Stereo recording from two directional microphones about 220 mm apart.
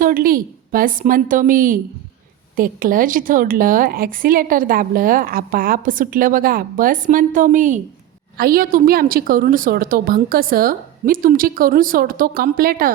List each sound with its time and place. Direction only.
0.0 s a woman's voice: 40° right (ahead or behind)